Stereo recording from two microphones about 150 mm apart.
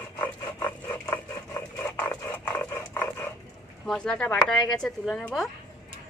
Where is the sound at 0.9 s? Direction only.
20° left (ahead or behind).